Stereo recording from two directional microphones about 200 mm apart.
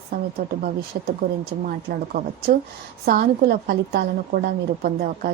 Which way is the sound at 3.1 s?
50° right (ahead or behind).